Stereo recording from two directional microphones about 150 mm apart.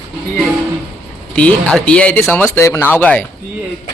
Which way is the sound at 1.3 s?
10° left (ahead or behind).